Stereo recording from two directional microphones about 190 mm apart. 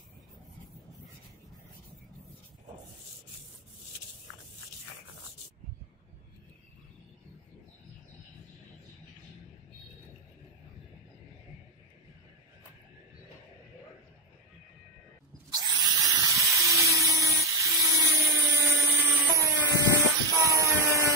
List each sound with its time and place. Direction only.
15.5 s drill: 20° right (ahead or behind)
16.5 s a sound: 15° right (ahead or behind)
17.4 s dental drill: 15° right (ahead or behind)